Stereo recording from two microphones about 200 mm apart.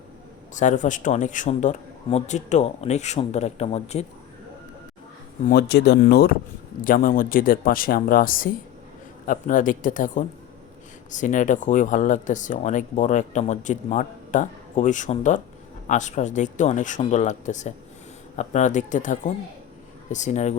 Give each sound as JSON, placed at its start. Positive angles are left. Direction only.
{"t": 0.5, "sound": "speech", "side_deg": 40}
{"t": 5.5, "sound": "speech", "side_deg": 55}